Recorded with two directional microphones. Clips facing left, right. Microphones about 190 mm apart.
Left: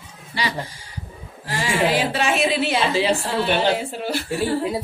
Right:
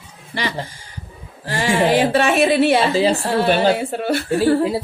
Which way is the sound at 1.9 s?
55° right (ahead or behind).